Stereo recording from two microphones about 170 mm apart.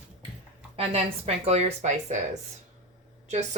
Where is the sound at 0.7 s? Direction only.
35° right (ahead or behind).